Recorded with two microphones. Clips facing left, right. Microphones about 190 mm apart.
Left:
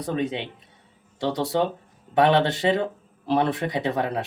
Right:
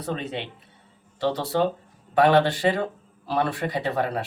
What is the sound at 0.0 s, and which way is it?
Speech, 15° left (ahead or behind).